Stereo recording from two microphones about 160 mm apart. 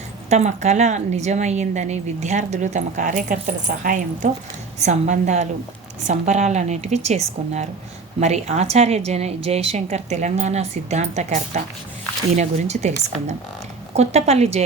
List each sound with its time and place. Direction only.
0.3 s a woman's voice: 45° right (ahead or behind)
8.2 s a woman's voice: 45° right (ahead or behind)